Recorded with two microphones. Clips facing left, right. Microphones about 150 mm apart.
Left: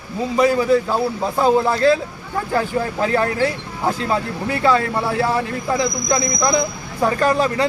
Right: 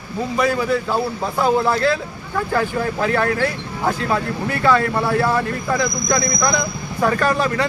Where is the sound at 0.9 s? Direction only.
20° left (ahead or behind).